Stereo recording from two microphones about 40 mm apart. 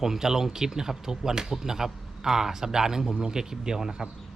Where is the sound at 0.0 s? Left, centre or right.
Centre.